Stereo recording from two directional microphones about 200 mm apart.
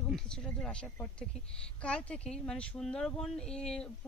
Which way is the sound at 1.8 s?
5° left (ahead or behind).